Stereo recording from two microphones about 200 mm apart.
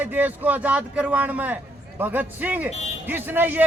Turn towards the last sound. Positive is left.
turn(degrees=-10)  # may be behind; listen again after turning